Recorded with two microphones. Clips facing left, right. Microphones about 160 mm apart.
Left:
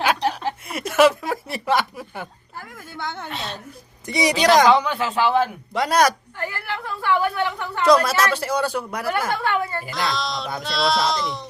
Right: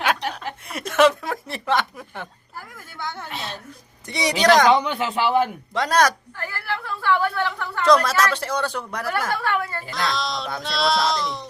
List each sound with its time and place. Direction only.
0.7 s chuckle: 5° left (ahead or behind)
2.7 s a sound: 20° left (ahead or behind)
4.0 s a woman's voice: 10° left (ahead or behind)
4.7 s speech: 20° right (ahead or behind)
5.7 s a woman's voice: 10° left (ahead or behind)
9.2 s a woman's voice: 20° left (ahead or behind)
9.9 s speech: centre (ahead or behind)